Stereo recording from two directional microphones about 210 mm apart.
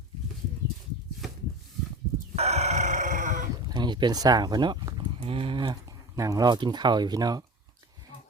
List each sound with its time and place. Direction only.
2.3 s chicken: 30° right (ahead or behind)
3.7 s speech: 20° right (ahead or behind)